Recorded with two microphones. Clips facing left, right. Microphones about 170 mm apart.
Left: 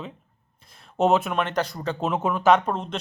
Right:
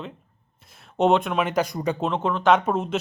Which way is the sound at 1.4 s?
10° right (ahead or behind).